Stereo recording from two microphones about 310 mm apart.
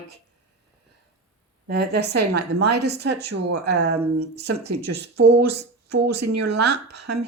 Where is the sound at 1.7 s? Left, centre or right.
Right.